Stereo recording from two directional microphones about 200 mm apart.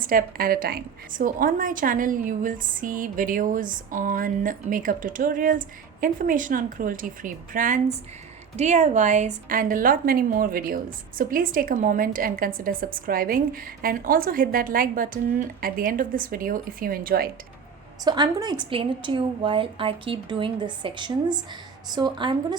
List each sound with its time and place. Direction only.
0.0 s a woman's voice: 45° right (ahead or behind)
18.0 s a woman's voice: 20° right (ahead or behind)